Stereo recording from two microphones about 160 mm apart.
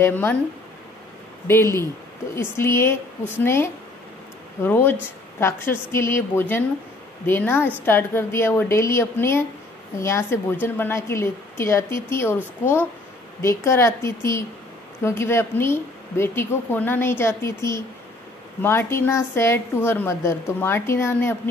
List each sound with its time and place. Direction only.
0.0 s a woman's voice: 15° left (ahead or behind)
1.5 s a woman's voice: 15° left (ahead or behind)
13.4 s a woman's voice: 15° left (ahead or behind)